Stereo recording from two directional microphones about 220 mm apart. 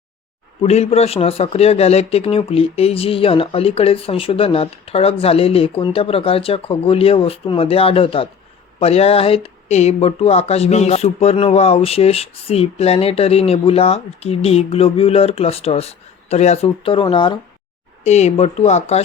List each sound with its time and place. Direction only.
0.6 s speech: 30° left (ahead or behind)